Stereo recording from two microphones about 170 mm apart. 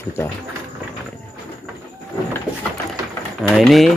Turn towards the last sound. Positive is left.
turn(degrees=0)  # may be behind; listen again after turning